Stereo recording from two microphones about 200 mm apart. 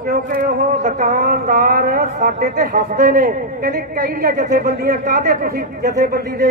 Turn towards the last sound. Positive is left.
turn(degrees=-45)  # may be behind; listen again after turning